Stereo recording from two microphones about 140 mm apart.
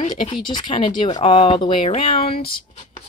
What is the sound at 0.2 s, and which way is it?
Speech, 35° left (ahead or behind).